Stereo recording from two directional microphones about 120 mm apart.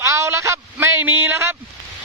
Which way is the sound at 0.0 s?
25° right (ahead or behind).